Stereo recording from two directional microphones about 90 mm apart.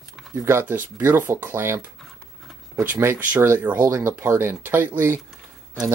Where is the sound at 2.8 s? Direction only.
25° right (ahead or behind).